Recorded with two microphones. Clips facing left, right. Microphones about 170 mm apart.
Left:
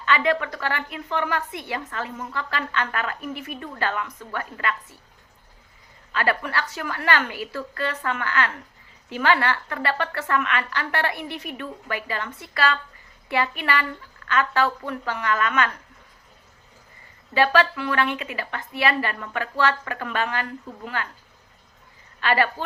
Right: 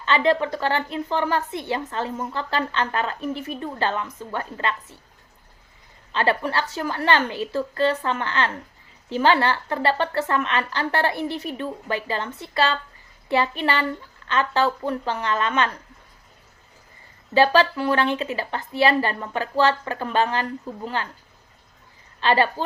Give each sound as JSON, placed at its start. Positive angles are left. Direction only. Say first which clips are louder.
{"t": 0.0, "sound": "speech", "louder": "right 2 dB", "side_deg": -30}
{"t": 6.1, "sound": "a woman's voice", "louder": "right 2 dB", "side_deg": -25}
{"t": 17.3, "sound": "a woman's voice", "louder": "right 2 dB", "side_deg": -30}
{"t": 22.2, "sound": "speech", "louder": "right 2 dB", "side_deg": -30}